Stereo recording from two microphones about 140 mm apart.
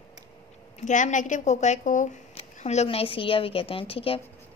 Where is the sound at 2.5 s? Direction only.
50° left (ahead or behind).